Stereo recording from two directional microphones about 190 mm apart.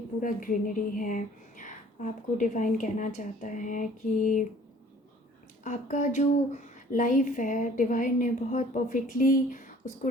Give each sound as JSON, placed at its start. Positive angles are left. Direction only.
{"t": 0.2, "sound": "a woman's voice", "side_deg": 45}
{"t": 5.6, "sound": "a woman's voice", "side_deg": 40}